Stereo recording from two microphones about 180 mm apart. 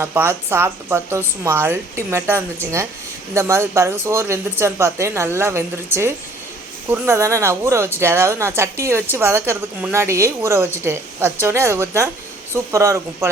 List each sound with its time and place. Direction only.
0.0 s a woman's voice: 10° right (ahead or behind)